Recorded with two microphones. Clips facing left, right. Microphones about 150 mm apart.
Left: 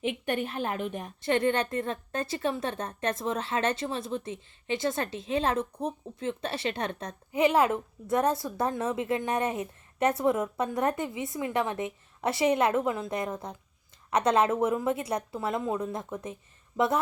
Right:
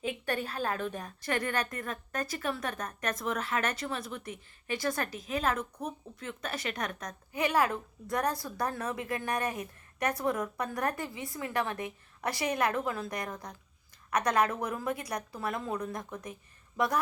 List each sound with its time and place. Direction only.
0.0 s a woman's voice: 20° left (ahead or behind)